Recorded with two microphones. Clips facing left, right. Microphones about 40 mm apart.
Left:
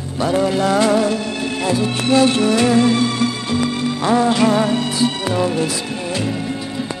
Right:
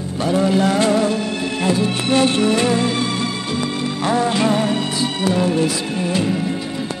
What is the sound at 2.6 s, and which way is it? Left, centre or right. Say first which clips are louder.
Music: left 4 dB; centre.